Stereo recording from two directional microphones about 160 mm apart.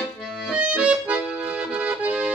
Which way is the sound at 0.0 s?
5° right (ahead or behind).